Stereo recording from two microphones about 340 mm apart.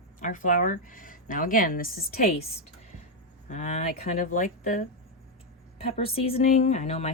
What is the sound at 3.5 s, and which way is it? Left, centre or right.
Speech, left.